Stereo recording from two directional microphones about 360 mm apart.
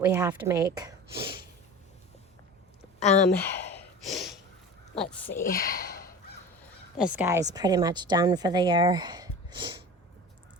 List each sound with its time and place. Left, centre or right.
0.0 s a woman's voice: centre
3.0 s speech: centre
4.0 s snort: centre
4.9 s a woman's voice: centre
5.5 s speech: left
7.0 s a woman's voice: centre